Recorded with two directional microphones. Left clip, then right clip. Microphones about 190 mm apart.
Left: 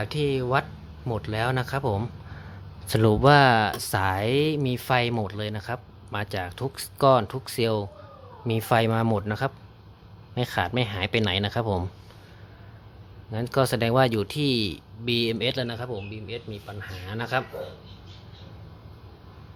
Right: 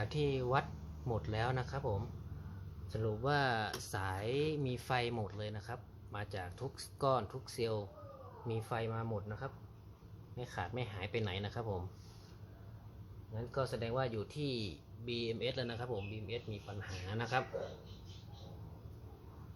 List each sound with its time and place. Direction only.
0.0 s speech: 25° left (ahead or behind); by 2.0 s 40° left (ahead or behind)
2.9 s speech: 60° left (ahead or behind)
3.2 s speech: 35° left (ahead or behind)
8.4 s speech: 50° left (ahead or behind)
10.3 s speech: 45° left (ahead or behind)
13.3 s speech: 65° left (ahead or behind); by 17.4 s 15° left (ahead or behind)